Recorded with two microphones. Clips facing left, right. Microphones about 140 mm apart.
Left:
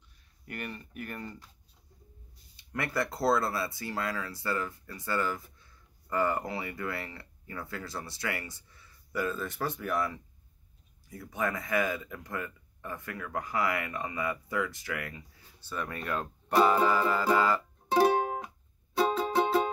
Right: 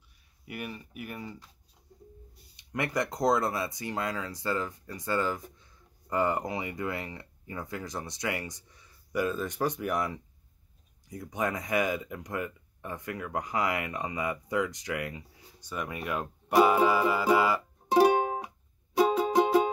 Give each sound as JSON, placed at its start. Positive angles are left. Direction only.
{"t": 0.5, "sound": "speech", "side_deg": -5}
{"t": 2.5, "sound": "speech", "side_deg": -20}
{"t": 18.9, "sound": "music", "side_deg": -15}